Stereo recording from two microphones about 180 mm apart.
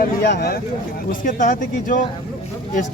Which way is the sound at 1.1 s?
45° left (ahead or behind).